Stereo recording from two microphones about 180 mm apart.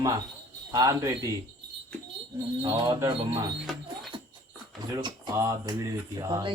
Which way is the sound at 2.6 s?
20° right (ahead or behind).